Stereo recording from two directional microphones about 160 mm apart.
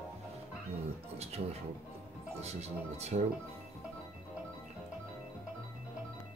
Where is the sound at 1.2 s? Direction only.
40° right (ahead or behind).